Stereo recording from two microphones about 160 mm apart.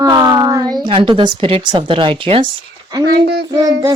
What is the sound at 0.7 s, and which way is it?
Speech, 30° right (ahead or behind).